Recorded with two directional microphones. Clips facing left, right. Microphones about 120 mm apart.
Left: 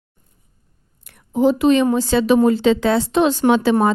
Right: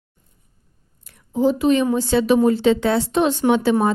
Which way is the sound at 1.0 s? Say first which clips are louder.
Left 2 dB; 70° left (ahead or behind).